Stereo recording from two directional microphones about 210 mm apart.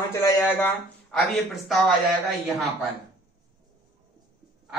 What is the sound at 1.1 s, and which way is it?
Speech, centre (ahead or behind).